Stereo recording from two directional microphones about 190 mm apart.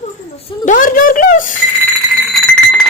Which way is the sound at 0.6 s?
45° left (ahead or behind).